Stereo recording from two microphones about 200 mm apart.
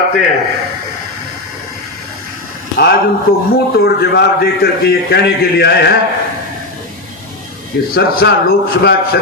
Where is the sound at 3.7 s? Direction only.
50° left (ahead or behind).